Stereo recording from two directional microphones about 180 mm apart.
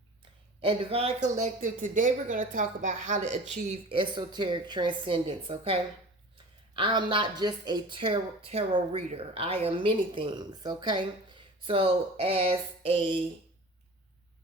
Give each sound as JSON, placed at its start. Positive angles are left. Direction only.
{"t": 0.6, "sound": "a woman's voice", "side_deg": -30}